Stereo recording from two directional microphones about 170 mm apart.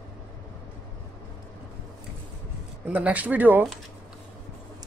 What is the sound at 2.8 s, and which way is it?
Speech, 10° right (ahead or behind).